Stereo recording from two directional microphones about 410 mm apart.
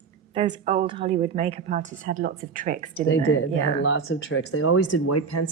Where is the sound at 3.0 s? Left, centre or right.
Left.